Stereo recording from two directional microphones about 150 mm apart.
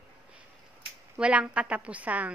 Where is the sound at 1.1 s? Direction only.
5° right (ahead or behind).